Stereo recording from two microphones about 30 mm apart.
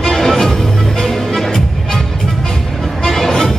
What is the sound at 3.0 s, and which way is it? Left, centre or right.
Music, centre.